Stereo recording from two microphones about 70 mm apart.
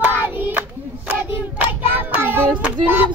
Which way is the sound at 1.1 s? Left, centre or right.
Right.